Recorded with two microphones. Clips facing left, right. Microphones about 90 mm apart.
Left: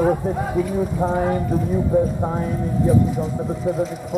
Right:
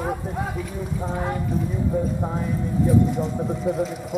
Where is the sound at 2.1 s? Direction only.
20° left (ahead or behind).